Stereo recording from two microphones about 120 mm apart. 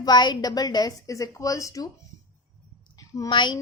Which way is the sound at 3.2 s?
40° left (ahead or behind).